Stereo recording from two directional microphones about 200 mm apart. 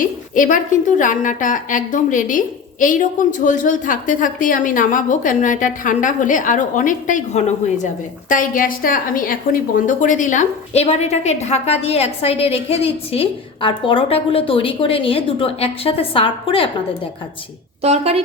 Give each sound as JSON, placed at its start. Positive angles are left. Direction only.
{"t": 0.0, "sound": "a woman's voice", "side_deg": 40}
{"t": 17.8, "sound": "speech", "side_deg": -30}